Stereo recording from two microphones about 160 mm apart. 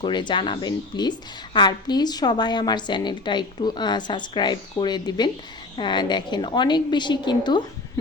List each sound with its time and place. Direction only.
0.0 s a woman's voice: 30° left (ahead or behind)